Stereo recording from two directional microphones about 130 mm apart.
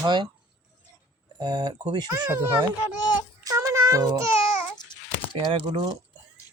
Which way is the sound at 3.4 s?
25° right (ahead or behind).